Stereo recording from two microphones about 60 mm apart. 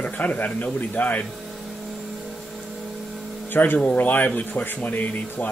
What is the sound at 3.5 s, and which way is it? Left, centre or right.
Speech, left.